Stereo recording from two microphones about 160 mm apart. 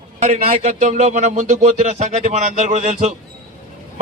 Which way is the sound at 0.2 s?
45° right (ahead or behind).